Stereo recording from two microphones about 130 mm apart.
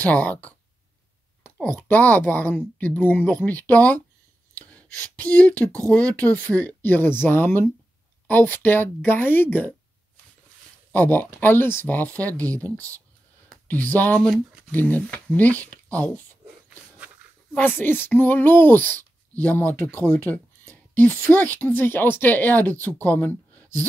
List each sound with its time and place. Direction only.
0.0 s speech: 10° left (ahead or behind)
4.6 s a sound: 10° left (ahead or behind)
5.0 s speech: 10° left (ahead or behind)
10.9 s speech: 15° left (ahead or behind)
13.7 s speech: 15° left (ahead or behind)
17.6 s speech: 15° left (ahead or behind)